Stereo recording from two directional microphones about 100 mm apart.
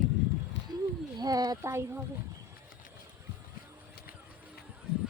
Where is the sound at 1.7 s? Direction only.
25° right (ahead or behind).